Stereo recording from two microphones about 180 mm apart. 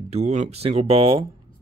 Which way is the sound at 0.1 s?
40° right (ahead or behind).